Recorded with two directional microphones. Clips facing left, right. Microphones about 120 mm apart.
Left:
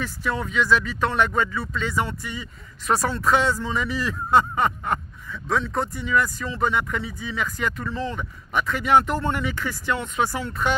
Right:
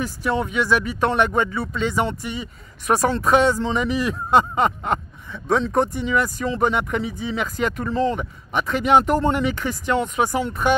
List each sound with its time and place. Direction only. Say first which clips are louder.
0.0 s speech: right 4 dB; 15° right (ahead or behind); by 8.2 s 35° right (ahead or behind)
8.2 s speech: right 1 dB; 20° right (ahead or behind)
9.0 s speech: right 6 dB; 40° right (ahead or behind)
9.3 s speech: right 4 dB; 20° right (ahead or behind)